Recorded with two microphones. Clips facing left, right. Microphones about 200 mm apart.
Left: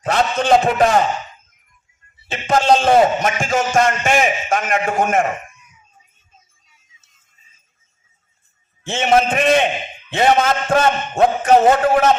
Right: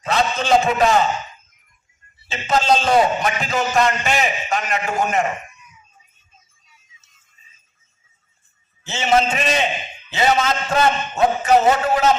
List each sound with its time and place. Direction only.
0.0 s a man's voice: 50° left (ahead or behind)
2.2 s a man's voice: 55° left (ahead or behind)
8.8 s a man's voice: 55° left (ahead or behind)